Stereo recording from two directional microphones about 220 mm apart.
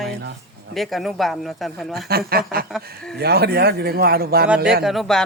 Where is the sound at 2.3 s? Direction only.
45° right (ahead or behind).